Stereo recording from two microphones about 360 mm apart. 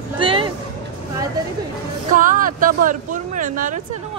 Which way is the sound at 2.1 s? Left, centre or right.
Right.